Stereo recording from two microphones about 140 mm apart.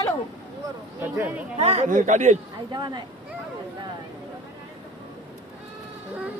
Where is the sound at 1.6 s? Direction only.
50° right (ahead or behind).